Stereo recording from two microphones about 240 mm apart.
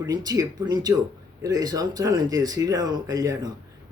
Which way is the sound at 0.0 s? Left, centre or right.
Centre.